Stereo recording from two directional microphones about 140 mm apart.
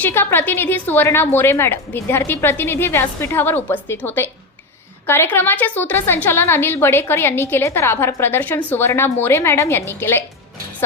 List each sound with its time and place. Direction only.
0.0 s a woman's voice: 15° left (ahead or behind)